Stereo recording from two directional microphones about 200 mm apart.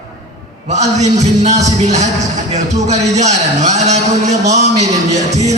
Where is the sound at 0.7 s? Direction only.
35° right (ahead or behind).